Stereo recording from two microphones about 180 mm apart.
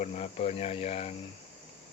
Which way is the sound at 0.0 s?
35° left (ahead or behind).